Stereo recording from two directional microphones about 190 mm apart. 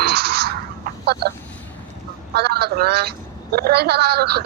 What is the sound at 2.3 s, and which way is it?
Speech, 55° right (ahead or behind).